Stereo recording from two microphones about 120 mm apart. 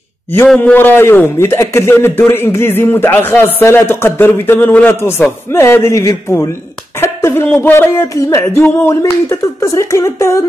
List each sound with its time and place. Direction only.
0.6 s a man's voice: 15° left (ahead or behind)
7.0 s a sound: 20° left (ahead or behind)
7.4 s a man's voice: 15° left (ahead or behind)